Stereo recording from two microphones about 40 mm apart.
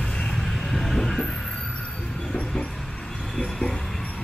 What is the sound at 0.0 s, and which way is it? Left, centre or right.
Vehicle, centre.